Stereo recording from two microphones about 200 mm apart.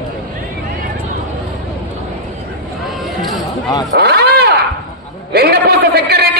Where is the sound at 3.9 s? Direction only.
55° right (ahead or behind).